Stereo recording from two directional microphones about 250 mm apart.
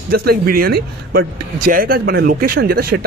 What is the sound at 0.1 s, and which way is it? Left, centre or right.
Speech, right.